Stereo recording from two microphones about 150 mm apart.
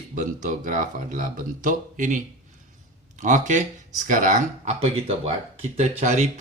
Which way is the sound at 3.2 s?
55° right (ahead or behind).